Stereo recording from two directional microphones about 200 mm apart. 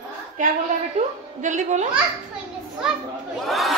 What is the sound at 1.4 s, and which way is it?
Speech, 40° right (ahead or behind).